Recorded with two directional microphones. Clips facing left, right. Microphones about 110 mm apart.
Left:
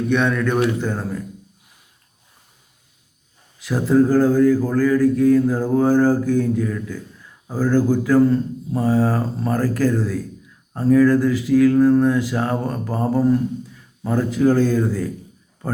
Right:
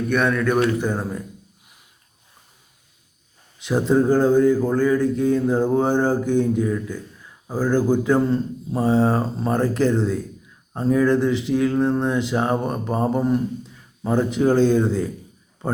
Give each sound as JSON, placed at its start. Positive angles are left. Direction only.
{"t": 0.1, "sound": "a man's voice", "side_deg": 0}
{"t": 3.6, "sound": "mantra", "side_deg": -20}